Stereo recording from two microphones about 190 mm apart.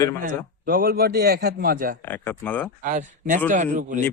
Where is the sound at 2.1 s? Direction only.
10° left (ahead or behind).